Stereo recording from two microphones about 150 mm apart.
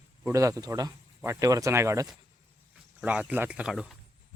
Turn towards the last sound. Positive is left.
turn(degrees=-5)  # may be behind; listen again after turning